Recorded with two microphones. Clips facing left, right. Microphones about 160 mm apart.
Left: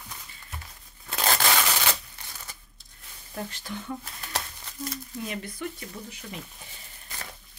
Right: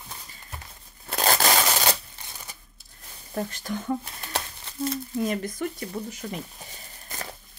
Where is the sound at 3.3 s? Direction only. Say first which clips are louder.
Right 5 dB; 45° right (ahead or behind).